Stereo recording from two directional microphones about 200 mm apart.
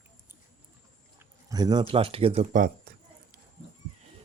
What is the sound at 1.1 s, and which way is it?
Speech, 20° right (ahead or behind).